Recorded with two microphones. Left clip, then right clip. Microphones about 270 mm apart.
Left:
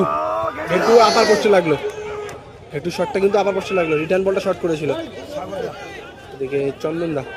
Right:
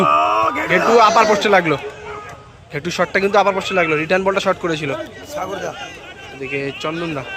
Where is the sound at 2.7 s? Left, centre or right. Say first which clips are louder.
Right 2 dB; centre.